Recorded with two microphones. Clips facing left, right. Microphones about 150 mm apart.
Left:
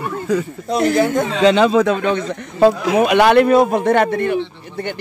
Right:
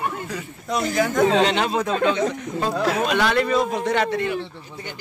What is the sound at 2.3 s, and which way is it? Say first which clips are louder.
Speech: left 11 dB; 75° left (ahead or behind).